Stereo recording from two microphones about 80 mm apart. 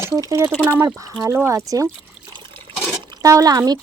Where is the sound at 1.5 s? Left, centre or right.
Right.